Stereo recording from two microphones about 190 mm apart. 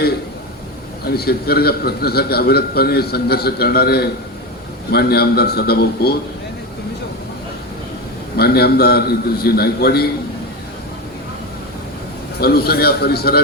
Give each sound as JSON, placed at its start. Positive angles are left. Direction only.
{"t": 1.0, "sound": "a man's voice", "side_deg": 55}
{"t": 8.4, "sound": "a man's voice", "side_deg": 55}
{"t": 12.4, "sound": "a man's voice", "side_deg": 55}